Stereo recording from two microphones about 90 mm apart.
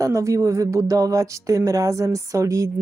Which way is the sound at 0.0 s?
35° right (ahead or behind).